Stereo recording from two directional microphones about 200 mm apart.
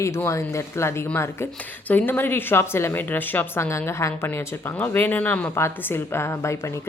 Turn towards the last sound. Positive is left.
turn(degrees=10)  # may be behind; listen again after turning